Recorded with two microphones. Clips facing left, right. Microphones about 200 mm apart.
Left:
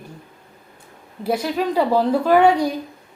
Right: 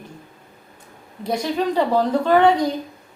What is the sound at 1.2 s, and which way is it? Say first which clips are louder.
A woman's voice: left 1 dB; 5° left (ahead or behind).